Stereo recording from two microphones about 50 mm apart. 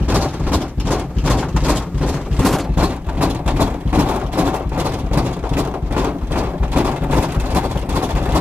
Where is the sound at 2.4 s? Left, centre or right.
Centre.